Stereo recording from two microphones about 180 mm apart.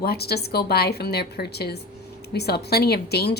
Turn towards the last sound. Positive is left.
turn(degrees=65)  # may be behind; listen again after turning